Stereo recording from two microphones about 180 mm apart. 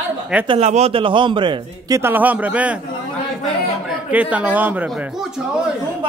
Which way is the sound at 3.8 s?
5° right (ahead or behind).